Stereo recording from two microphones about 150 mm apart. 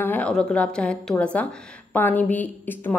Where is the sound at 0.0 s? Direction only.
10° left (ahead or behind).